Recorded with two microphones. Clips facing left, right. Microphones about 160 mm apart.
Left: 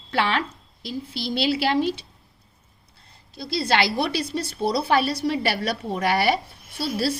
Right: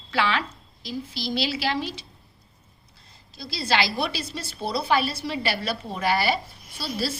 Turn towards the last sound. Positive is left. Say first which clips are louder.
# left 4 dB
turn(degrees=65)  # may be behind; listen again after turning